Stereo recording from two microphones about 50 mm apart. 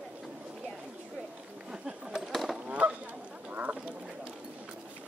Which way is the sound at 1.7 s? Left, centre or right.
Centre.